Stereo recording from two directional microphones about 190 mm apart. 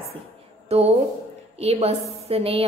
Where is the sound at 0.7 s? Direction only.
35° right (ahead or behind).